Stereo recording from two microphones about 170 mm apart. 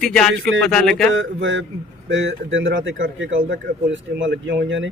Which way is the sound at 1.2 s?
90° right.